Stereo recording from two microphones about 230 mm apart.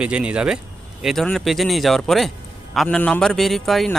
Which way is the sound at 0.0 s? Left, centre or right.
Centre.